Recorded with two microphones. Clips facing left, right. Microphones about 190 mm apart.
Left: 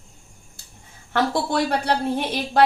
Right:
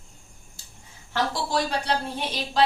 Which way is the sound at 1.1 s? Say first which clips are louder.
Left 4 dB; 60° left (ahead or behind).